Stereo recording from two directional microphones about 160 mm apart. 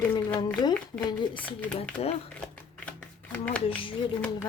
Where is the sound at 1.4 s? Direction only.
10° left (ahead or behind).